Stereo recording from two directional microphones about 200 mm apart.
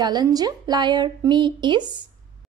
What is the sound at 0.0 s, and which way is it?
A woman's voice, 20° right (ahead or behind).